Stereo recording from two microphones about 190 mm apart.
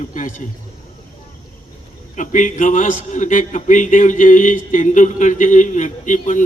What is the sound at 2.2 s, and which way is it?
A man's voice, 40° left (ahead or behind).